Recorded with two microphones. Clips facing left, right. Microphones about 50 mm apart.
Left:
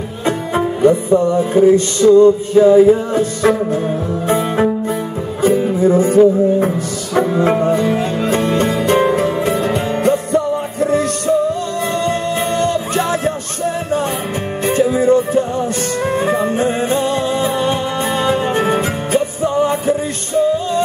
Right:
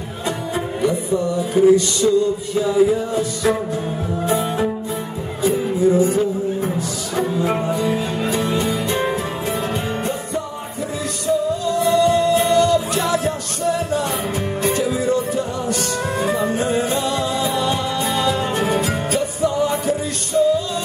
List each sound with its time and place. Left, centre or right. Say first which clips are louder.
0.8 s music: left 8 dB; left
5.4 s music: left 4 dB; left